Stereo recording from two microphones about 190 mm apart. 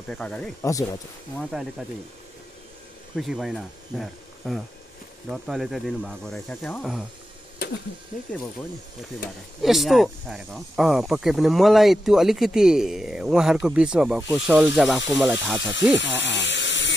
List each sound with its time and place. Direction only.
0.1 s speech: 5° left (ahead or behind)
0.7 s speech: 15° left (ahead or behind)
1.4 s speech: centre (ahead or behind)
3.2 s speech: centre (ahead or behind)
7.5 s a sound: 60° left (ahead or behind)
9.6 s speech: centre (ahead or behind)
16.0 s a sound: 70° left (ahead or behind)